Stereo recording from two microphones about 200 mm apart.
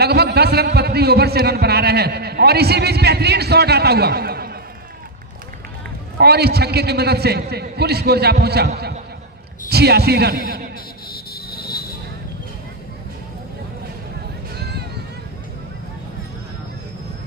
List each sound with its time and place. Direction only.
0.0 s a man's voice: 55° right (ahead or behind)
6.1 s a man's voice: 55° right (ahead or behind)
11.1 s vehicle: 50° left (ahead or behind)
14.5 s a sound: 55° right (ahead or behind)